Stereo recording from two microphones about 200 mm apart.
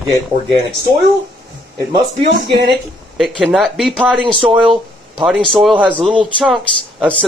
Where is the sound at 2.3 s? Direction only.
55° right (ahead or behind).